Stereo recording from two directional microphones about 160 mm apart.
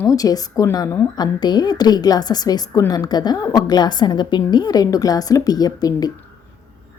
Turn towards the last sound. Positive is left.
turn(degrees=25)  # may be behind; listen again after turning